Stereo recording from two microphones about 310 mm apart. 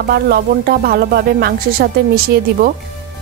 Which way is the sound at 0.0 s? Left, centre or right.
Right.